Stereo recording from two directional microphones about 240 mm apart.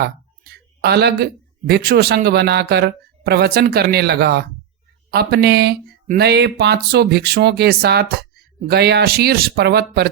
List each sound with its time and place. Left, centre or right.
0.4 s speech: right